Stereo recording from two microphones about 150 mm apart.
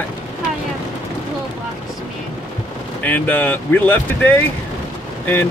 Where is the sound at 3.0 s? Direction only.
10° left (ahead or behind).